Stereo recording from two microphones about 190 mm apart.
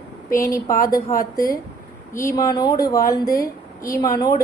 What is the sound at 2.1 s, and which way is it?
A woman's voice, 15° left (ahead or behind).